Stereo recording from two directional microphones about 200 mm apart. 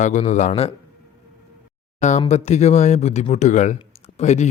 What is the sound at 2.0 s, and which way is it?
Speech, 35° left (ahead or behind).